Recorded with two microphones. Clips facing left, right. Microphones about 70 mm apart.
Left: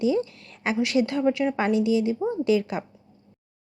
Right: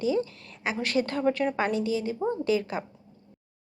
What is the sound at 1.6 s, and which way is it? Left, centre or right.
A woman's voice, right.